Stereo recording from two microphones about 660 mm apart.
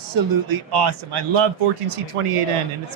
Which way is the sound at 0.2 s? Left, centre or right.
Right.